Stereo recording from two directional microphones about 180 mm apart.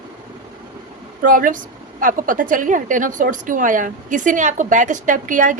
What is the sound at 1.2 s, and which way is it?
A woman's voice, 50° right (ahead or behind).